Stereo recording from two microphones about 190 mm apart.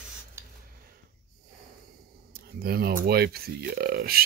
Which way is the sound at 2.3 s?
55° right (ahead or behind).